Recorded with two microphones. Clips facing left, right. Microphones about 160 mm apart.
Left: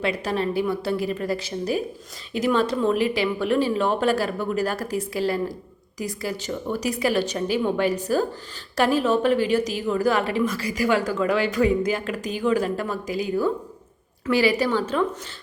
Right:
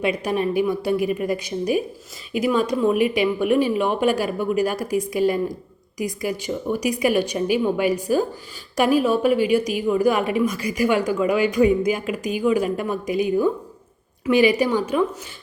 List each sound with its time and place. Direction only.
0.0 s speech: 15° right (ahead or behind)